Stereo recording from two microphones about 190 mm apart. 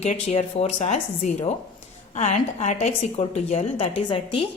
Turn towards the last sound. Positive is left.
turn(degrees=30)  # may be behind; listen again after turning